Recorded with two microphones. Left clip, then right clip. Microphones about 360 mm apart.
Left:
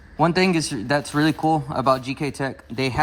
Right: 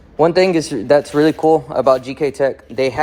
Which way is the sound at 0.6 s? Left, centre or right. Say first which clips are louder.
Right 9 dB; centre.